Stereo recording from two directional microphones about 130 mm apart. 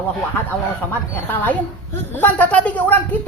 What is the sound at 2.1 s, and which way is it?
Speech, 15° left (ahead or behind).